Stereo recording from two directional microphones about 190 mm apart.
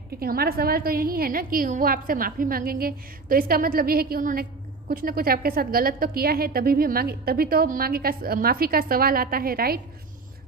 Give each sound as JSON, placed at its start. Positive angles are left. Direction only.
{"t": 0.1, "sound": "a woman's voice", "side_deg": -55}